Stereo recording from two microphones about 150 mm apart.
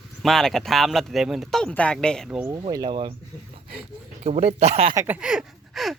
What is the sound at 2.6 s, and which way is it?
Speech, 25° right (ahead or behind).